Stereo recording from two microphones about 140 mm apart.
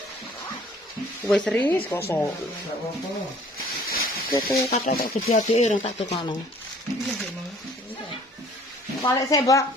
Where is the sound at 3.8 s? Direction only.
90° left.